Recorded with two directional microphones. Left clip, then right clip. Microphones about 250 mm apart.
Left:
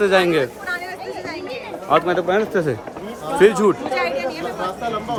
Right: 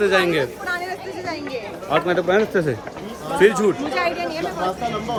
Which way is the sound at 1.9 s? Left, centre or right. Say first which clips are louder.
Left 1 dB; centre.